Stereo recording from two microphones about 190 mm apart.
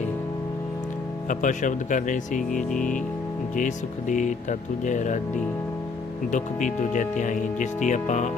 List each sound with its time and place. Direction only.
1.3 s speech: 40° left (ahead or behind)
6.3 s speech: 40° left (ahead or behind)